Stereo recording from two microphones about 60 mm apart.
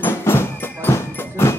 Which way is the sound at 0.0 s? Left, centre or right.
Left.